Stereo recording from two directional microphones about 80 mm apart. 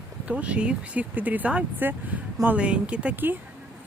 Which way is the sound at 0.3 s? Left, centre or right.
Centre.